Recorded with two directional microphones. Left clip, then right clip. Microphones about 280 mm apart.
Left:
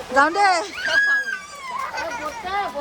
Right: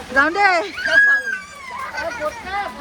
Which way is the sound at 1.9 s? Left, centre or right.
Left.